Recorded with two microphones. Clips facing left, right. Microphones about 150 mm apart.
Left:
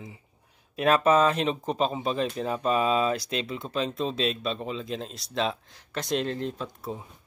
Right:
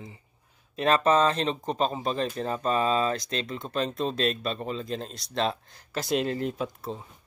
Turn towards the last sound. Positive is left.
turn(degrees=10)  # may be behind; listen again after turning